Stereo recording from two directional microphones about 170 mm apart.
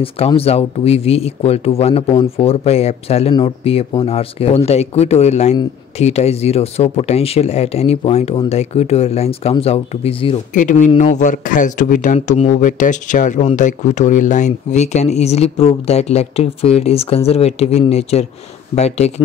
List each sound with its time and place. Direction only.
0.0 s speech: 35° left (ahead or behind)
2.0 s speech: 25° left (ahead or behind)
2.3 s speech: 35° left (ahead or behind)
10.5 s speech: 50° left (ahead or behind)